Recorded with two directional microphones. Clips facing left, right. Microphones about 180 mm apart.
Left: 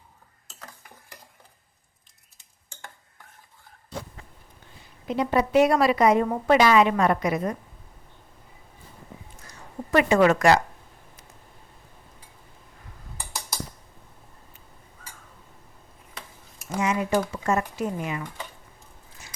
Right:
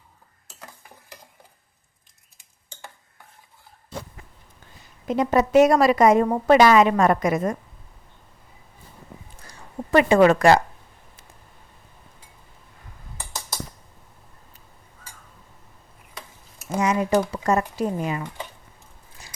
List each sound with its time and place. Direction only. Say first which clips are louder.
5.0 s a woman's voice: right 3 dB; 45° right (ahead or behind)
9.5 s a sound: right 3 dB; 30° right (ahead or behind)
16.8 s speech: right 3 dB; 40° right (ahead or behind)